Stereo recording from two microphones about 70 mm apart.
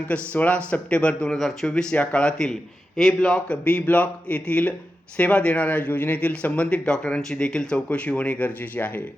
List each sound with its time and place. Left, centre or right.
0.1 s a man's voice: centre
1.4 s speech: centre
1.7 s a man's voice: centre